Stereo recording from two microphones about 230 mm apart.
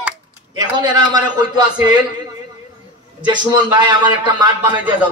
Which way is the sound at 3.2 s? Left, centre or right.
Centre.